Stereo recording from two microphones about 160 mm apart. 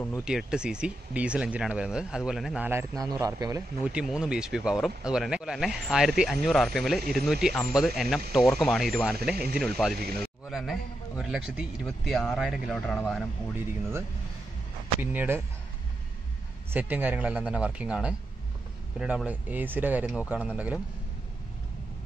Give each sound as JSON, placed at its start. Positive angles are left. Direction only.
{"t": 0.2, "sound": "a man's voice", "side_deg": -5}
{"t": 3.8, "sound": "speech", "side_deg": -5}
{"t": 15.0, "sound": "speech", "side_deg": -15}
{"t": 16.7, "sound": "speech", "side_deg": -10}